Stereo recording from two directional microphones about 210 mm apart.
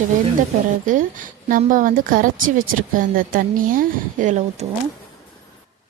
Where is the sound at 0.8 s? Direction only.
40° right (ahead or behind).